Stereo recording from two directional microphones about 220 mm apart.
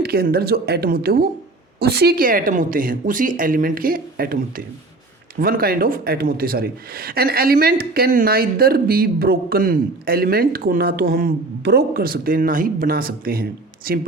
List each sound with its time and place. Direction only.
0.0 s speech: 45° right (ahead or behind)